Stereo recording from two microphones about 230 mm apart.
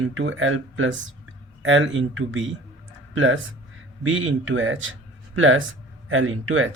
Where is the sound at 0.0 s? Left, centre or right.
Right.